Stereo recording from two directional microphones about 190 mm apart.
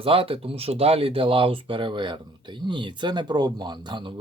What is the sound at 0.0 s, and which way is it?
Speech, 30° right (ahead or behind).